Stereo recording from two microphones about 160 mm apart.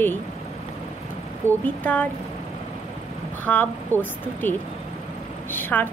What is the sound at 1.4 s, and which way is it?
Speech, 15° right (ahead or behind).